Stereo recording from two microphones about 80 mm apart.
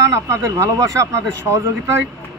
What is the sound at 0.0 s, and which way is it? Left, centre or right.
A man's voice, right.